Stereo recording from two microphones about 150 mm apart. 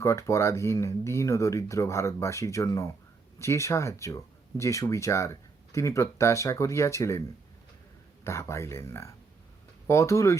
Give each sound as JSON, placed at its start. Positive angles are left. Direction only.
{"t": 0.0, "sound": "speech", "side_deg": 20}
{"t": 8.2, "sound": "speech", "side_deg": 20}